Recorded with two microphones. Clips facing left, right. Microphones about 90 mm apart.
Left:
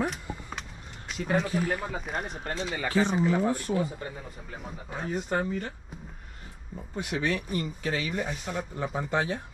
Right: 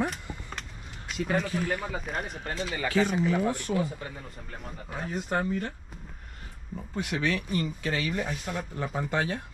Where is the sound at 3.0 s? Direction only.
40° left (ahead or behind).